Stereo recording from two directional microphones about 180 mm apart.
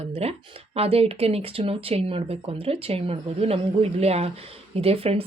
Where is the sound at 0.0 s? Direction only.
35° right (ahead or behind).